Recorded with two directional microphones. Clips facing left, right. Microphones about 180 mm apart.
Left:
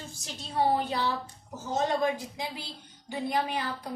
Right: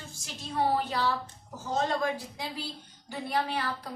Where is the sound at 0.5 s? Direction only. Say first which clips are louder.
Left 1 dB; 20° left (ahead or behind).